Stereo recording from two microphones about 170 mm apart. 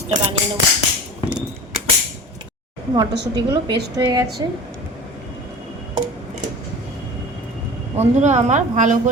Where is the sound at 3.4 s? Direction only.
25° right (ahead or behind).